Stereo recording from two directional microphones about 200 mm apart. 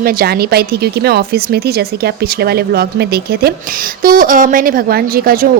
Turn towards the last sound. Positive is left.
turn(degrees=-45)  # may be behind; listen again after turning